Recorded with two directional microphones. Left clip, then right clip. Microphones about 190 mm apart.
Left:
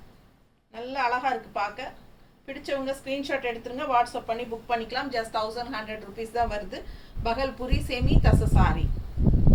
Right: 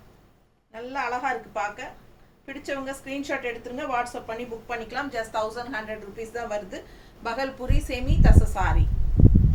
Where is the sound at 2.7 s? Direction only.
10° right (ahead or behind).